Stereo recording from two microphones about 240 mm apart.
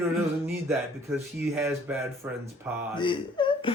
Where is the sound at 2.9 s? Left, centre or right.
Centre.